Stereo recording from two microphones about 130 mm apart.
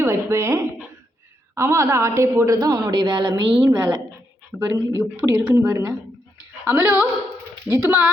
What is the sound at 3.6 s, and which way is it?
A woman's voice, 20° right (ahead or behind).